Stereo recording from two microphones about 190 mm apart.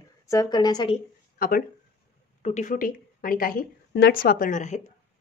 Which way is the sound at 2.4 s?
40° left (ahead or behind).